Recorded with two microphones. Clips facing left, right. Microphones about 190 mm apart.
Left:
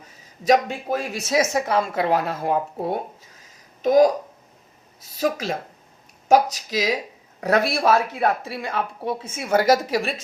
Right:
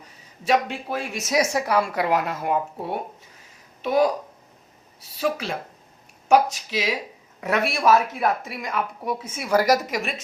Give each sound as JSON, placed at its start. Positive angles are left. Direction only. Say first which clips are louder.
{"t": 0.4, "sound": "speech", "louder": "left 3 dB", "side_deg": 40}
{"t": 1.2, "sound": "a woman's voice", "louder": "even", "side_deg": 25}
{"t": 5.1, "sound": "a woman's voice", "louder": "left 2 dB", "side_deg": 40}